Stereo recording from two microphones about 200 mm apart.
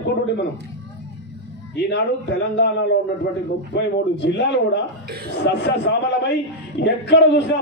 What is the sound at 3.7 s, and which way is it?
A man's voice, 60° left (ahead or behind).